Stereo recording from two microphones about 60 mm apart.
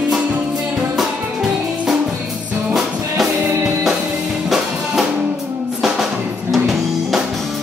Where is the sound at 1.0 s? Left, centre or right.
Centre.